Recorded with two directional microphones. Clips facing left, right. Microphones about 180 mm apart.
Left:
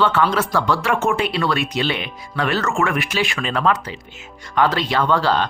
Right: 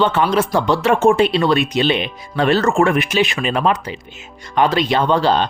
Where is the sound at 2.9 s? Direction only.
20° right (ahead or behind).